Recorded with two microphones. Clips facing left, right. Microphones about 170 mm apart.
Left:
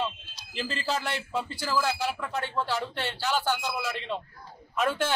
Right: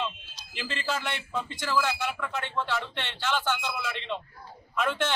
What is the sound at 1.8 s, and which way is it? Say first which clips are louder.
Speech: even; 35° left (ahead or behind).